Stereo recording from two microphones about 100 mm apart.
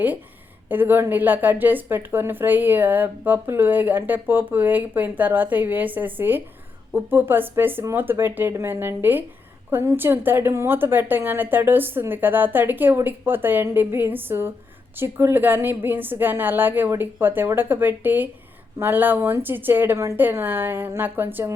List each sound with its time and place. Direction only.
0.7 s speech: 20° right (ahead or behind)